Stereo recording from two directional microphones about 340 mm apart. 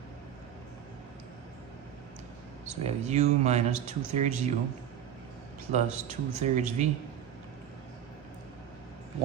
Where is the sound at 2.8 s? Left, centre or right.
Centre.